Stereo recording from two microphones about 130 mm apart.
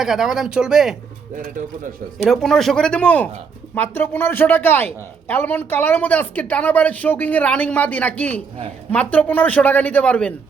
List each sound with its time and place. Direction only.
0.0 s speech: centre (ahead or behind)
2.1 s a woman's voice: centre (ahead or behind)